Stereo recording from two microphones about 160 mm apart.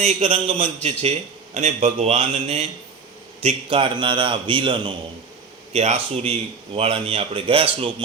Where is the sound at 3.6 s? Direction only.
30° right (ahead or behind).